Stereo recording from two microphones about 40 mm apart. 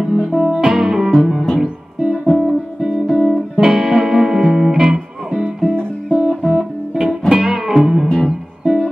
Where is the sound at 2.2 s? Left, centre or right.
Centre.